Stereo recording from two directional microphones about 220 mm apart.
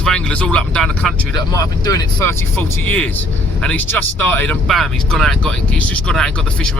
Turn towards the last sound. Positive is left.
turn(degrees=5)  # may be behind; listen again after turning